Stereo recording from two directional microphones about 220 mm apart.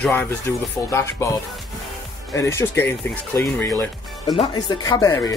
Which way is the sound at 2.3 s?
10° left (ahead or behind).